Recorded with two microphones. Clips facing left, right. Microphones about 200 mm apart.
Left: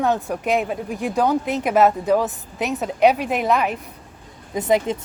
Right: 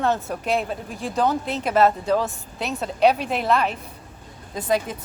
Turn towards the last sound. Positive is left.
turn(degrees=20)  # may be behind; listen again after turning